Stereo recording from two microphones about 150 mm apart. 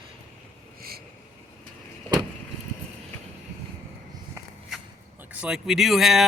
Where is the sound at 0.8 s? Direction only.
90° right.